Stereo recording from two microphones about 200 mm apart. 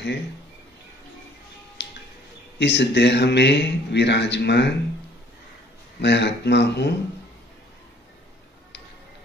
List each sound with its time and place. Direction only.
1.8 s music: 60° left (ahead or behind)
2.6 s speech: 60° left (ahead or behind)
5.9 s speech: 60° left (ahead or behind)